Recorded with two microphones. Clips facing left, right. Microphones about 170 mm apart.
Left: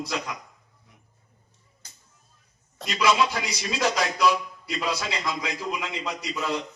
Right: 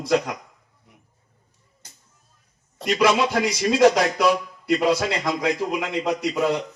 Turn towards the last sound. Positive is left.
turn(degrees=-60)  # may be behind; listen again after turning